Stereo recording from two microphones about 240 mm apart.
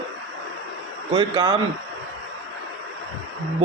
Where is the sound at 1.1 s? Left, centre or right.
Centre.